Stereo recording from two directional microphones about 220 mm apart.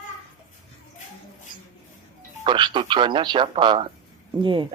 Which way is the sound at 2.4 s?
20° right (ahead or behind).